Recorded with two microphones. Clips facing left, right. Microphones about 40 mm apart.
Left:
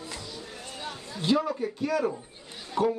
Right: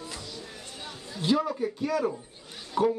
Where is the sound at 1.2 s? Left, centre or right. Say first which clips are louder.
Even; centre.